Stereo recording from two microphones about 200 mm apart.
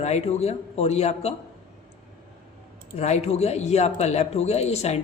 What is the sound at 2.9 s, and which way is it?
Speech, 35° left (ahead or behind).